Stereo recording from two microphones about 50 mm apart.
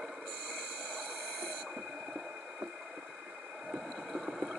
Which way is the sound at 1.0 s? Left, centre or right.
Centre.